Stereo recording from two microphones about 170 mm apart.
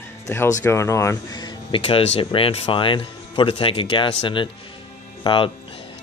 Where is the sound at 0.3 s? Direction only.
15° left (ahead or behind).